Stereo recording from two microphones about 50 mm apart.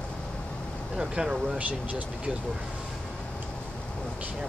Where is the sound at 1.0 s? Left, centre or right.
Centre.